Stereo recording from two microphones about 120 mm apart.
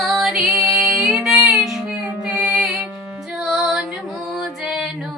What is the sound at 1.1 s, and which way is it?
Child singing, 5° right (ahead or behind).